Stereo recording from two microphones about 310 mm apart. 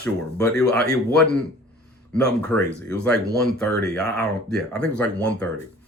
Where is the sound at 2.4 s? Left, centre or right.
Centre.